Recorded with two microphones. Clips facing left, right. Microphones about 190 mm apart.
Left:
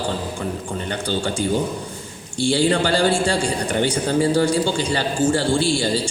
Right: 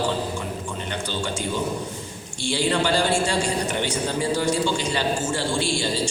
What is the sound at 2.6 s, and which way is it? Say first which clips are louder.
A man's voice: left 1 dB; 35° left (ahead or behind).